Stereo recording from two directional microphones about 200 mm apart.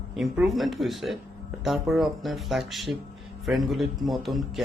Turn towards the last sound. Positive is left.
turn(degrees=0)  # may be behind; listen again after turning